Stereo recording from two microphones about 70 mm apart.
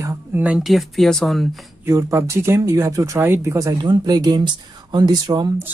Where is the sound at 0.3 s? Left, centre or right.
Right.